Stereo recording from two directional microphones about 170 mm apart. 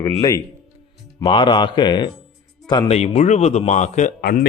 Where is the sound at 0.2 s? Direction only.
20° left (ahead or behind).